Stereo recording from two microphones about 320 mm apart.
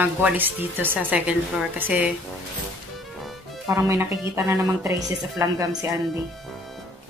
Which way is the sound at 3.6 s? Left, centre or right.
Centre.